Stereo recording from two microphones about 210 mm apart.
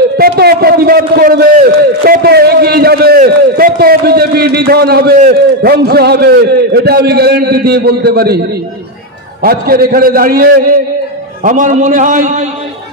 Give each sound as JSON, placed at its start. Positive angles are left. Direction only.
{"t": 0.2, "sound": "a sound", "side_deg": -50}
{"t": 2.0, "sound": "a man's voice", "side_deg": -50}
{"t": 9.4, "sound": "a man's voice", "side_deg": -45}